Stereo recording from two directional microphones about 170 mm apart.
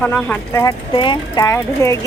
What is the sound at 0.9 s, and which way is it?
Speech, 30° left (ahead or behind).